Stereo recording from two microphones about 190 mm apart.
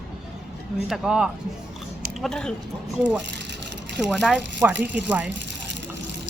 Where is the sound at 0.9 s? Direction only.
5° right (ahead or behind).